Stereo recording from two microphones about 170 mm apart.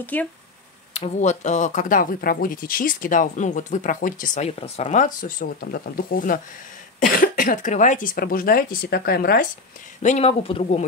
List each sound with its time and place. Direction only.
0.0 s speech: 10° left (ahead or behind)
0.9 s speech: 40° left (ahead or behind); by 9.5 s 65° left (ahead or behind)
10.0 s speech: 40° left (ahead or behind)